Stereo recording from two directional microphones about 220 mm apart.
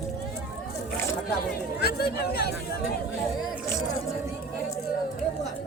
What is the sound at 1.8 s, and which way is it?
Speech, 45° left (ahead or behind).